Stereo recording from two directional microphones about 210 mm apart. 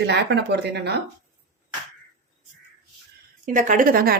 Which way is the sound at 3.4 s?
35° right (ahead or behind).